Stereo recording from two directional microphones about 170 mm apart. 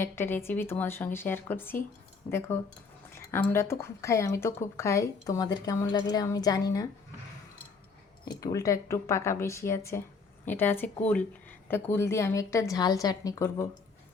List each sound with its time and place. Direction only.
0.0 s speech: 15° left (ahead or behind)
3.5 s a woman's voice: 15° left (ahead or behind)
8.2 s speech: 20° left (ahead or behind)